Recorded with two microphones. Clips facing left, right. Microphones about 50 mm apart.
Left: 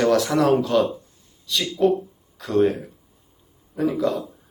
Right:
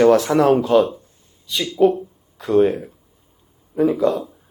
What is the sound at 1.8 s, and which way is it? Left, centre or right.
A man's voice, centre.